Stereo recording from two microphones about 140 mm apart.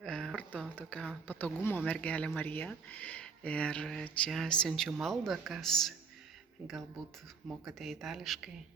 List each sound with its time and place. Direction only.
0.0 s a sound: 5° left (ahead or behind)
1.3 s speech: 10° left (ahead or behind)
7.6 s speech: centre (ahead or behind)